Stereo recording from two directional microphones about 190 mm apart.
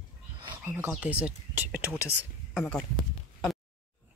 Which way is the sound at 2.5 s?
5° left (ahead or behind).